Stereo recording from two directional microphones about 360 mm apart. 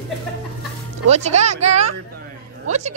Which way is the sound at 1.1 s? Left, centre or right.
Centre.